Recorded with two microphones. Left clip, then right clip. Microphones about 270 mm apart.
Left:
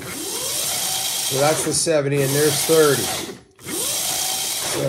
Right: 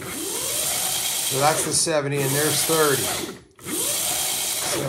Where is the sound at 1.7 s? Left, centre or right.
Centre.